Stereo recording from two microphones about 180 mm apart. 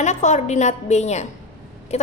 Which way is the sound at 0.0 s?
40° left (ahead or behind).